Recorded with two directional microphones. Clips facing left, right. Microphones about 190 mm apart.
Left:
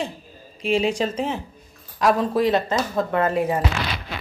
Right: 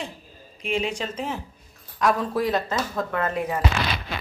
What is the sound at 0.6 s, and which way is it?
Speech, 30° left (ahead or behind).